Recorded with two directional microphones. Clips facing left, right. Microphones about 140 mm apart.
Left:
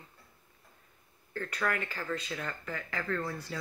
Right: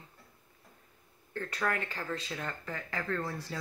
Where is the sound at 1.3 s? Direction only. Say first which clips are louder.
Even; 25° right (ahead or behind).